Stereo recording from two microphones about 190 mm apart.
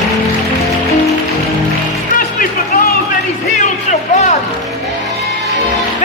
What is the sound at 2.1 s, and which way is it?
Music, 50° left (ahead or behind).